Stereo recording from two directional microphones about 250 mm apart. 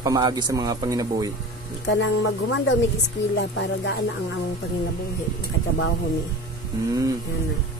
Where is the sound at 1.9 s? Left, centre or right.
Left.